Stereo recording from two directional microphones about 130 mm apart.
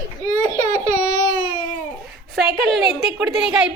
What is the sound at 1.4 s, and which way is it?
Babbling, 40° left (ahead or behind).